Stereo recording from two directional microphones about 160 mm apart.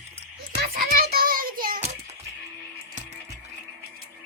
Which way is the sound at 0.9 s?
65° right (ahead or behind).